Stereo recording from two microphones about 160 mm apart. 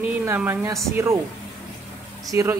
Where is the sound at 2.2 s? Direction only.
20° right (ahead or behind).